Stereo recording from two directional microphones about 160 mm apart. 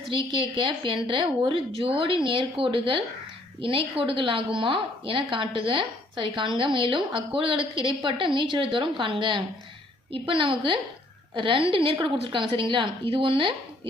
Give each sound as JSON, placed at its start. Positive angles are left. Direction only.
{"t": 0.3, "sound": "a woman's voice", "side_deg": -30}